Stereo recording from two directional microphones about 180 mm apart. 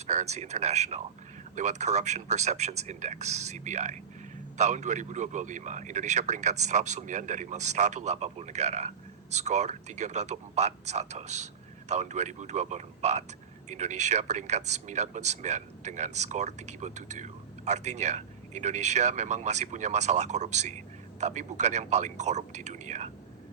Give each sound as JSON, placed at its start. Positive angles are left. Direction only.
{"t": 0.1, "sound": "speech", "side_deg": -35}